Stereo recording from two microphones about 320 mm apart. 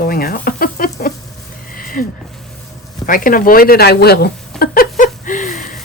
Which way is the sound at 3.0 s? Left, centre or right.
Left.